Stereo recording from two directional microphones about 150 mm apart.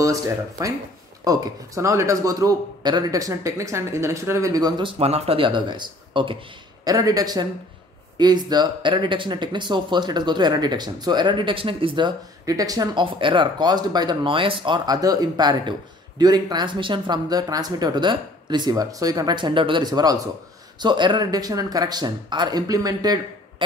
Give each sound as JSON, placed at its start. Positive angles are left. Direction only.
{"t": 0.0, "sound": "speech", "side_deg": -20}